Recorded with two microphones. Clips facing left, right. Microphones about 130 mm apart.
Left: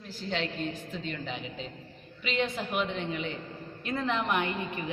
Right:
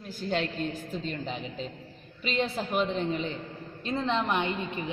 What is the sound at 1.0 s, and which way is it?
A woman's voice, 35° right (ahead or behind).